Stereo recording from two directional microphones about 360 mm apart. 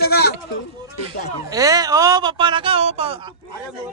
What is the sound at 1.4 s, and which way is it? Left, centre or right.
Speech, centre.